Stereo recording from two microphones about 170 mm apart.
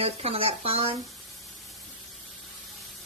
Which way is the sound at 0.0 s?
35° right (ahead or behind).